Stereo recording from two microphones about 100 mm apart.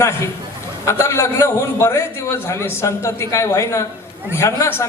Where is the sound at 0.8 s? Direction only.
30° left (ahead or behind).